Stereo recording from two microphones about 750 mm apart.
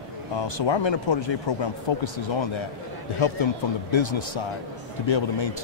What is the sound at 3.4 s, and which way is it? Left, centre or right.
Speech, left.